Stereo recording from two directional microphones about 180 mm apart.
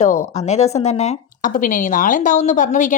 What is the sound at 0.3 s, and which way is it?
A woman's voice, 35° left (ahead or behind).